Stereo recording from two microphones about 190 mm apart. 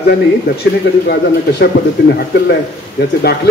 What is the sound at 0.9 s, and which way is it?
Speech, 70° left (ahead or behind).